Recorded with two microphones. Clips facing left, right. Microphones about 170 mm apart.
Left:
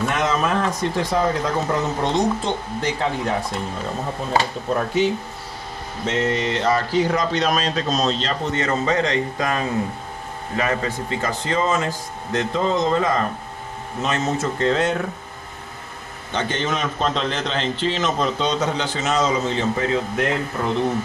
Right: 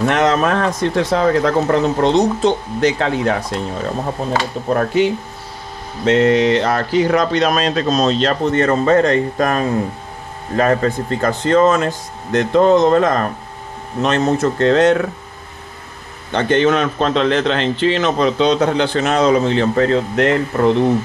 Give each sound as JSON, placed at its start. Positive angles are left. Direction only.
{"t": 0.0, "sound": "speech", "side_deg": -75}
{"t": 4.6, "sound": "speech", "side_deg": -70}
{"t": 6.0, "sound": "a man's voice", "side_deg": -85}
{"t": 16.3, "sound": "a man's voice", "side_deg": -60}